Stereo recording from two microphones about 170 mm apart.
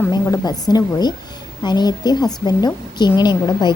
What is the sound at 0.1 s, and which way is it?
A woman's voice, 25° left (ahead or behind).